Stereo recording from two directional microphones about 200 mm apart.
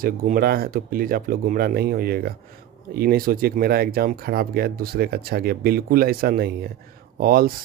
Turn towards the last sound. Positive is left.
turn(degrees=-45)  # may be behind; listen again after turning